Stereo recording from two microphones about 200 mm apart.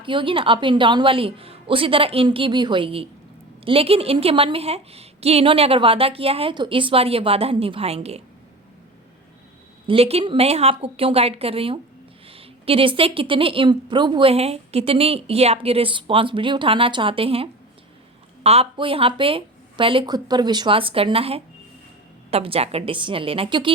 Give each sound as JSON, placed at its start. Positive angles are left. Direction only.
{"t": 0.0, "sound": "a woman's voice", "side_deg": -25}
{"t": 9.8, "sound": "a woman's voice", "side_deg": -30}